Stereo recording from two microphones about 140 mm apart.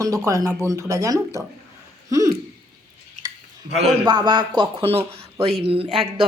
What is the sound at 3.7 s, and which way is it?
Speech, centre (ahead or behind).